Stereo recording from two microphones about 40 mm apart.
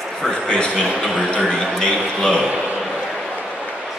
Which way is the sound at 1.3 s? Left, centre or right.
Left.